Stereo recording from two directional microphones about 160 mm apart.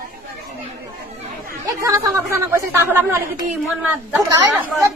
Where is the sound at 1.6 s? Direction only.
20° right (ahead or behind).